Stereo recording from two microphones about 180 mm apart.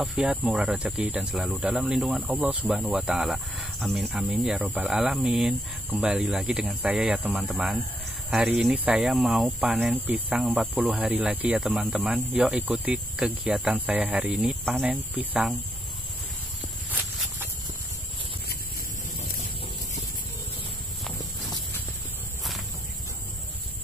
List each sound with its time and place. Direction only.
0.0 s speech: 5° right (ahead or behind)
16.9 s walk: 10° right (ahead or behind)
21.2 s clip-clop: 20° left (ahead or behind)